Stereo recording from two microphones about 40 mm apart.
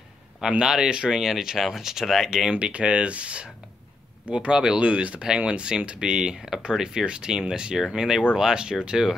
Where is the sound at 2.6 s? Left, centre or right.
Right.